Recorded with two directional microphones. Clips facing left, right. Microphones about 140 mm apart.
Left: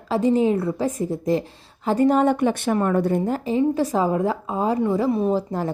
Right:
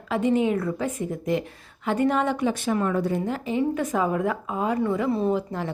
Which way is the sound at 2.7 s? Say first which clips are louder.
Left 3 dB; 45° left (ahead or behind).